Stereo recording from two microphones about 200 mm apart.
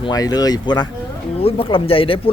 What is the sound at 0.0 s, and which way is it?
Speech, 20° left (ahead or behind).